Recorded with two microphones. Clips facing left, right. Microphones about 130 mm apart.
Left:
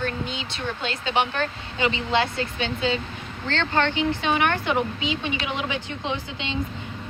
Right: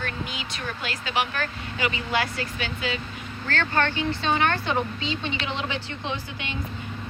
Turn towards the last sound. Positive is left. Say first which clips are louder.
# left 3 dB
turn(degrees=20)  # may be behind; listen again after turning